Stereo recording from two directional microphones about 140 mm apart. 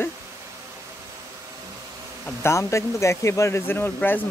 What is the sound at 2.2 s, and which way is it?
A man's voice, 20° left (ahead or behind).